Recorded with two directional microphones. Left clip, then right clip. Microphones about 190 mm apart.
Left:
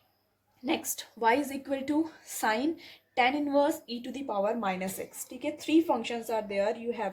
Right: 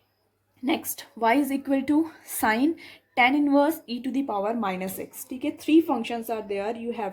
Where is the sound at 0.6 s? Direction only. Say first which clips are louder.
Right 4 dB; 30° right (ahead or behind).